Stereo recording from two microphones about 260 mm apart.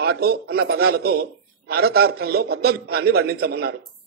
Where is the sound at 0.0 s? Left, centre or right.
Right.